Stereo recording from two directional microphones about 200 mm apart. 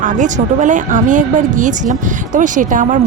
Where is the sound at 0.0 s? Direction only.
40° right (ahead or behind).